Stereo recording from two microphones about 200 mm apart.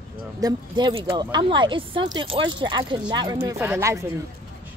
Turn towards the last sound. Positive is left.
turn(degrees=-15)  # may be behind; listen again after turning